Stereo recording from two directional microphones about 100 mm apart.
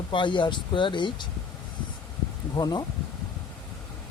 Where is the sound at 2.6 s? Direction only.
40° left (ahead or behind).